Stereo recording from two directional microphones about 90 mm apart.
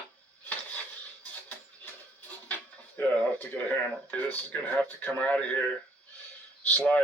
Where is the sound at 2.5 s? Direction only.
20° left (ahead or behind).